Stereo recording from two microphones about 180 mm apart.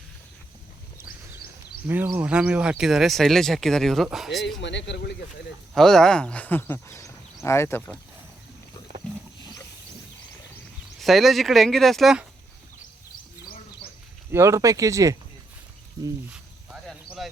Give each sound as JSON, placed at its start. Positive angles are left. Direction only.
{"t": 1.0, "sound": "a sound", "side_deg": 55}
{"t": 1.9, "sound": "speech", "side_deg": -10}
{"t": 4.6, "sound": "speech", "side_deg": 80}
{"t": 5.7, "sound": "speech", "side_deg": 0}
{"t": 11.0, "sound": "speech", "side_deg": 0}
{"t": 14.3, "sound": "speech", "side_deg": -15}
{"t": 16.3, "sound": "snake", "side_deg": -5}